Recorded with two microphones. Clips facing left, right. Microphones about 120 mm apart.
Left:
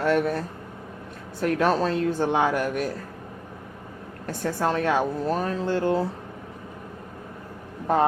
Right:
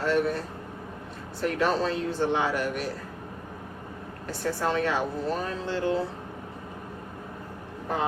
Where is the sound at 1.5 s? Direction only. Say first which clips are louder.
Left 3 dB; 45° left (ahead or behind).